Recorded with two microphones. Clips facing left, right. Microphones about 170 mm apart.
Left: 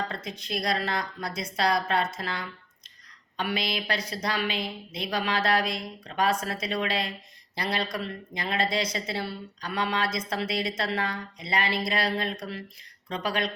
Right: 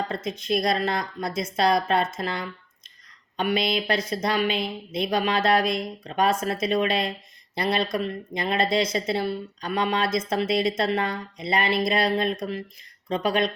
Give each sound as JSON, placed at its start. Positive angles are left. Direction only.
{"t": 0.1, "sound": "speech", "side_deg": -20}
{"t": 3.3, "sound": "speech", "side_deg": -20}